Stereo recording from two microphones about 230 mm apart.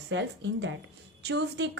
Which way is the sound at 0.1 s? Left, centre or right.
Right.